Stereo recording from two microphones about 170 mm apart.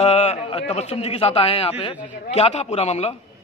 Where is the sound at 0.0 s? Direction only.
40° left (ahead or behind).